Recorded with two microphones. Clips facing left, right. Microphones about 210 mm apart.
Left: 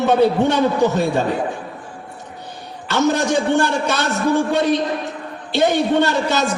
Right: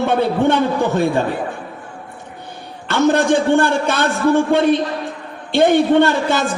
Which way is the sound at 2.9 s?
55° right (ahead or behind).